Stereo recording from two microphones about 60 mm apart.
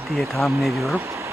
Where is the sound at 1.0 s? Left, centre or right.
Right.